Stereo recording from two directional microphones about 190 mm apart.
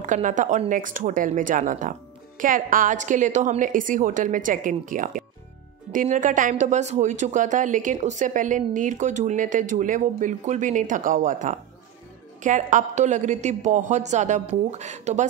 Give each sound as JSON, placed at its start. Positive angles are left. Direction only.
{"t": 0.0, "sound": "a woman's voice", "side_deg": -40}